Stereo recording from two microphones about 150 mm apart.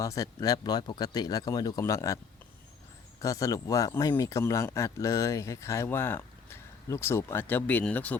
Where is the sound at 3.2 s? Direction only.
20° left (ahead or behind).